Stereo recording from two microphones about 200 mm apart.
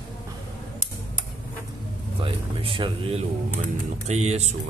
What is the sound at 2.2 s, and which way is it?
Speech, 25° right (ahead or behind).